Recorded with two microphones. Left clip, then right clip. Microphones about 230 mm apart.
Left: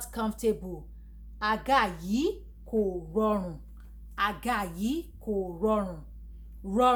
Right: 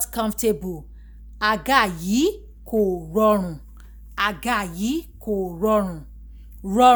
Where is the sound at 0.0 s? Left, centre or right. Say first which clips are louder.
Right 7 dB; right.